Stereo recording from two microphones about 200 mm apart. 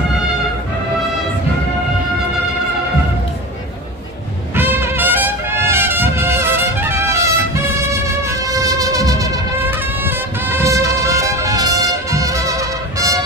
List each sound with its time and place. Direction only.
4.6 s trumpet: 10° right (ahead or behind)
8.3 s music: 15° right (ahead or behind)